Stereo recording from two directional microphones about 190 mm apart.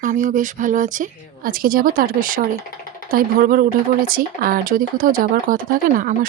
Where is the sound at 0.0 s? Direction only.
40° right (ahead or behind).